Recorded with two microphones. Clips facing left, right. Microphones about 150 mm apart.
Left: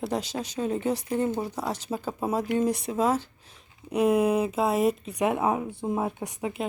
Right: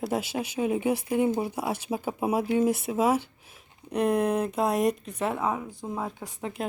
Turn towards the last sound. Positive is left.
turn(degrees=15)  # may be behind; listen again after turning